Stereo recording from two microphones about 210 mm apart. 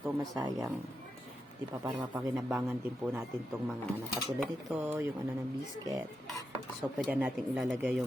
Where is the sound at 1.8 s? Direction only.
15° right (ahead or behind).